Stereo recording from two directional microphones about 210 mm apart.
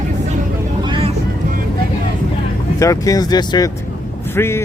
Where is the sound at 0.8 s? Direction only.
25° right (ahead or behind).